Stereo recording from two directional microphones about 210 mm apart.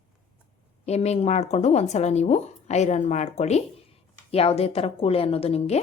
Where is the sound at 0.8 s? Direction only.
30° left (ahead or behind).